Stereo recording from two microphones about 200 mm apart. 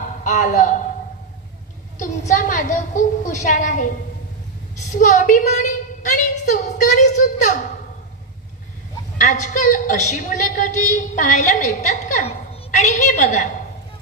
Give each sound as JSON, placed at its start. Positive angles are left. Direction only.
{"t": 0.2, "sound": "a woman's voice", "side_deg": 40}
{"t": 2.0, "sound": "a woman's voice", "side_deg": 40}
{"t": 4.9, "sound": "a woman's voice", "side_deg": 40}
{"t": 9.2, "sound": "a woman's voice", "side_deg": 40}